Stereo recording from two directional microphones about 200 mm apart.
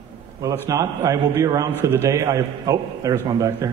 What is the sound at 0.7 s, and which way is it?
A man's voice, 15° right (ahead or behind).